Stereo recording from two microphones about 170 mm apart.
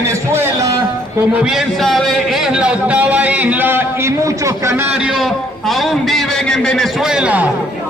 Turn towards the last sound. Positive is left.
turn(degrees=-10)  # may be behind; listen again after turning